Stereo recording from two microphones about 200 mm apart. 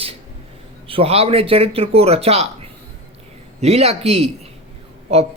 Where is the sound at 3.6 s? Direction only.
30° right (ahead or behind).